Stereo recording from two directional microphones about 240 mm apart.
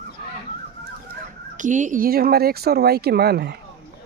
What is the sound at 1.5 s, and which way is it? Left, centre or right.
Speech, right.